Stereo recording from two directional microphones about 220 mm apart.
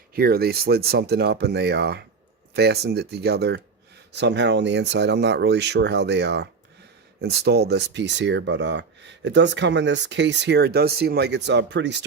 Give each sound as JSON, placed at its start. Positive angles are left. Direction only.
{"t": 0.1, "sound": "speech", "side_deg": -45}